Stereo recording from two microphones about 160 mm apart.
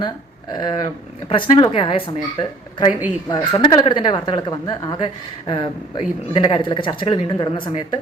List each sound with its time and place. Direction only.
0.5 s speech: 30° left (ahead or behind)